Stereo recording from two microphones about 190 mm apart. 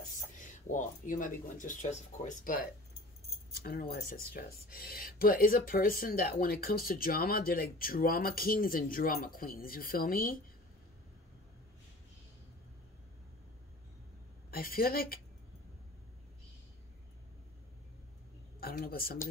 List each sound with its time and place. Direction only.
0.0 s speech: 45° left (ahead or behind)
3.9 s speech: 50° left (ahead or behind)
14.5 s speech: 50° left (ahead or behind)
18.6 s speech: 50° left (ahead or behind)